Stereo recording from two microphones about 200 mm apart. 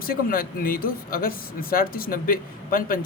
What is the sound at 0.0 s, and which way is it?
Speech, 45° left (ahead or behind).